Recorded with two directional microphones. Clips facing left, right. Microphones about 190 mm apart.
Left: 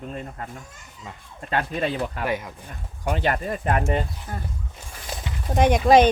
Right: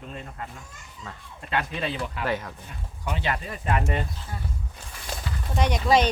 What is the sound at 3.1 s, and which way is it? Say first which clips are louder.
Speech: left 5 dB; 50° left (ahead or behind).